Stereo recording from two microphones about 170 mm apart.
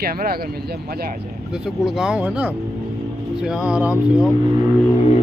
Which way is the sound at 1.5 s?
5° right (ahead or behind).